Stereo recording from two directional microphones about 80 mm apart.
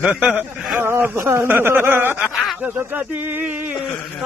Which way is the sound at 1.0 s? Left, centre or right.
Right.